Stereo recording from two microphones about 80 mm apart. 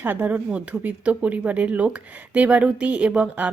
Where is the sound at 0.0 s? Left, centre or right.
Centre.